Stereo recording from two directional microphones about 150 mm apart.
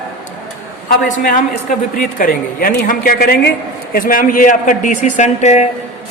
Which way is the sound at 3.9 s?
70° left (ahead or behind).